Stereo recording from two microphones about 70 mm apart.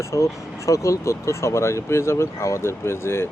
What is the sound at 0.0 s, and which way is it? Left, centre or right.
Speech, left.